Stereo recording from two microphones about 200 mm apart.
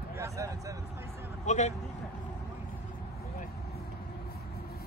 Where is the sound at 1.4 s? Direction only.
35° left (ahead or behind).